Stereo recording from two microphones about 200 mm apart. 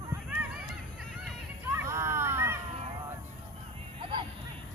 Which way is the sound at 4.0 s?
25° right (ahead or behind).